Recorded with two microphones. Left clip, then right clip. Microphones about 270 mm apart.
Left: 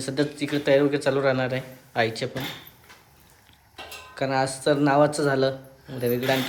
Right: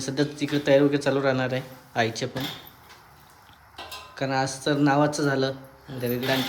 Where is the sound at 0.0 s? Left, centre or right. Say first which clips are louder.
Left 1 dB; centre.